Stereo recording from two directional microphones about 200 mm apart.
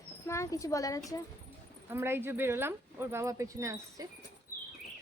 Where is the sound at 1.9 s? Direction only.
10° right (ahead or behind).